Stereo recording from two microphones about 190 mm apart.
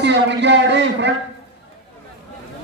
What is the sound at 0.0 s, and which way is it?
A man's voice, 70° right (ahead or behind).